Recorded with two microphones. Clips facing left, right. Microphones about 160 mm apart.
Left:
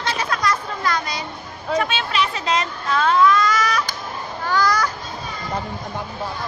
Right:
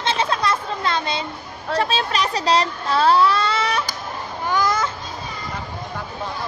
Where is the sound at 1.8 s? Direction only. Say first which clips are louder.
Right 1 dB; 35° right (ahead or behind).